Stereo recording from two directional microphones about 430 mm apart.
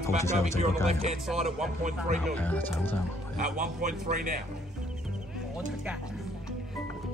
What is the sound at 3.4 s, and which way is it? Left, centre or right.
A man's voice, centre.